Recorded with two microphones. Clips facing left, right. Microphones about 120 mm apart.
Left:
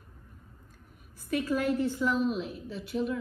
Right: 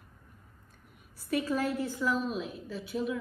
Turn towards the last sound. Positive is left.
turn(degrees=0)  # may be behind; listen again after turning